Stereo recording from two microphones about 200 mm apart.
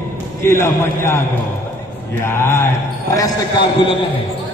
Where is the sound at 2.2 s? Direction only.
10° left (ahead or behind).